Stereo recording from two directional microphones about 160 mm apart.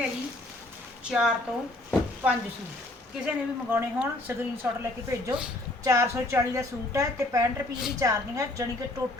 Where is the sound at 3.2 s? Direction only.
10° right (ahead or behind).